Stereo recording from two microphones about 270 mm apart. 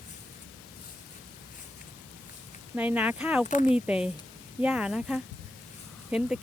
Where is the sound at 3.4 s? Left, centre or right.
Left.